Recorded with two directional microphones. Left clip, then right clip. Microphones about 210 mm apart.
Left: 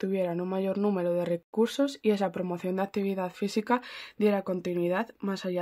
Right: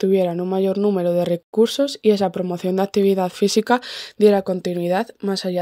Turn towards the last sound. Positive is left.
turn(degrees=-25)  # may be behind; listen again after turning